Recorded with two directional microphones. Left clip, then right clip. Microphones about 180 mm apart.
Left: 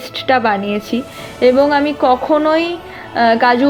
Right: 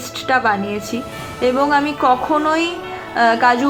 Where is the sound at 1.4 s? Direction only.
20° left (ahead or behind).